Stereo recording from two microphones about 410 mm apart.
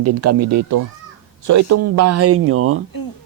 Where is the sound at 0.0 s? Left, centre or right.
Right.